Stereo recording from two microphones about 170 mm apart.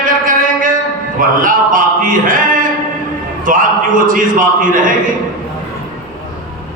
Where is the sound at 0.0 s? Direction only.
55° right (ahead or behind).